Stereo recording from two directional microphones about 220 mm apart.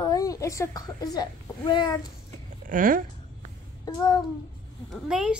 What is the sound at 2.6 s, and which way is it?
Speech, 40° right (ahead or behind).